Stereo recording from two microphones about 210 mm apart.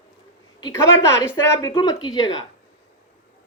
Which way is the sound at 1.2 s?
15° left (ahead or behind).